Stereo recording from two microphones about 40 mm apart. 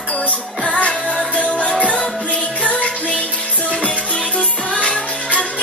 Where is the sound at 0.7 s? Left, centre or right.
Left.